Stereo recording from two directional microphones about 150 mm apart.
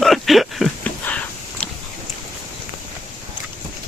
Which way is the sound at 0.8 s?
10° left (ahead or behind).